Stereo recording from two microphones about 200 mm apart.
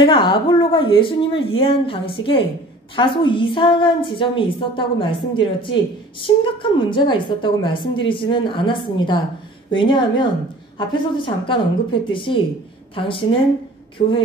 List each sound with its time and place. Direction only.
0.0 s a woman's voice: 25° left (ahead or behind)